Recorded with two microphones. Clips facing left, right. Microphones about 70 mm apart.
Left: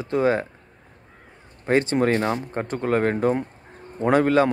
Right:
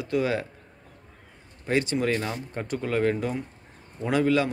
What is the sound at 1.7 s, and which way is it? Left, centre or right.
A man's voice, left.